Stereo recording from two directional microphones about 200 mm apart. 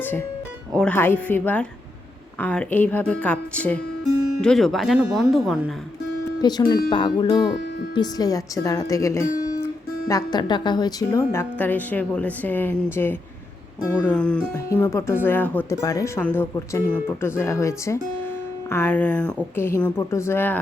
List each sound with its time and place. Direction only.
0.0 s a woman's voice: 10° left (ahead or behind)
6.4 s a woman's voice: 20° left (ahead or behind)